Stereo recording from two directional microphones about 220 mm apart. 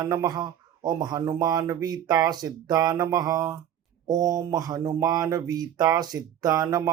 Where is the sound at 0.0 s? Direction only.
15° right (ahead or behind).